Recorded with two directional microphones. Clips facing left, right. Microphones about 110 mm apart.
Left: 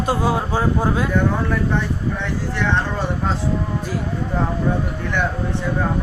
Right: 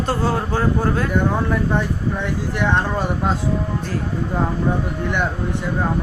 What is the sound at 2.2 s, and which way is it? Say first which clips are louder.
Speech: right 1 dB; 15° right (ahead or behind).